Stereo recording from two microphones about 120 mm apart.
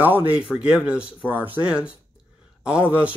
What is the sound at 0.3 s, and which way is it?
Speech, 10° right (ahead or behind).